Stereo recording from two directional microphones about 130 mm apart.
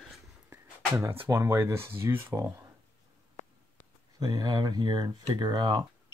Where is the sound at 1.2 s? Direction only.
20° right (ahead or behind).